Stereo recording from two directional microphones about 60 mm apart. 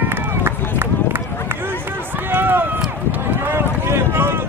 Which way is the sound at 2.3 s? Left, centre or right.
Right.